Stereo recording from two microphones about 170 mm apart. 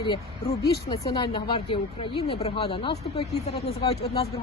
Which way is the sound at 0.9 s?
25° left (ahead or behind).